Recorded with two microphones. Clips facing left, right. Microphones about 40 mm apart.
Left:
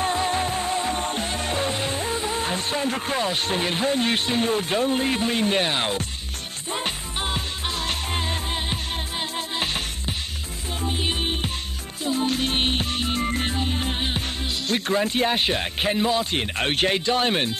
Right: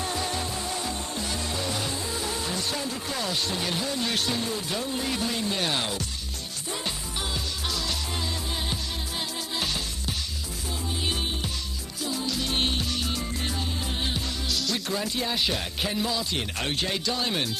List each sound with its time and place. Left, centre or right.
0.0 s music: left
2.2 s speech: left
6.7 s music: left